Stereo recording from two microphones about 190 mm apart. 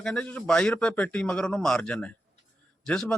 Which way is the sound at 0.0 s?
5° left (ahead or behind).